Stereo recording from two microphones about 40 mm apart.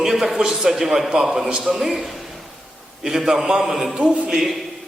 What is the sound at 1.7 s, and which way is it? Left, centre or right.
A man's voice, centre.